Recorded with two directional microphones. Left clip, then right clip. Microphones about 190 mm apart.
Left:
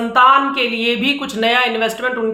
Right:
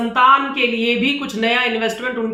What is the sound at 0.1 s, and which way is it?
Speech, 25° left (ahead or behind).